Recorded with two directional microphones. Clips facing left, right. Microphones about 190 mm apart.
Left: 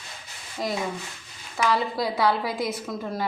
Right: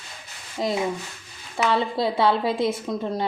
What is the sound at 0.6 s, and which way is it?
Speech, 25° right (ahead or behind).